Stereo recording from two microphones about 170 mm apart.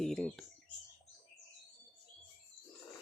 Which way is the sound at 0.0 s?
Centre (ahead or behind).